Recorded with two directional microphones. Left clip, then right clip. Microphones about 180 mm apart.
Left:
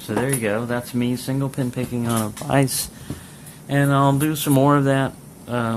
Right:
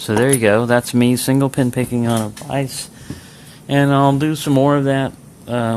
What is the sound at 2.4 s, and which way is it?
Speech, 15° left (ahead or behind).